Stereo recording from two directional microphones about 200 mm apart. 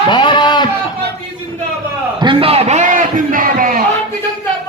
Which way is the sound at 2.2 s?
30° right (ahead or behind).